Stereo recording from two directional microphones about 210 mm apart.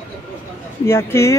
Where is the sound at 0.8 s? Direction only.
10° left (ahead or behind).